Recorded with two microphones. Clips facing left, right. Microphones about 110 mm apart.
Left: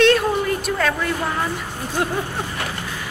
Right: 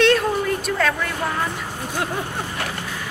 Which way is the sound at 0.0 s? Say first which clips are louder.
Left 1 dB; centre (ahead or behind).